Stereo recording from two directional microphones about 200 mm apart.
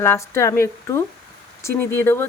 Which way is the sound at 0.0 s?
15° left (ahead or behind).